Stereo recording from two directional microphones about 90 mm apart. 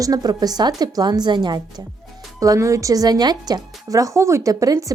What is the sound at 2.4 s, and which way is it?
A woman's voice, 40° right (ahead or behind).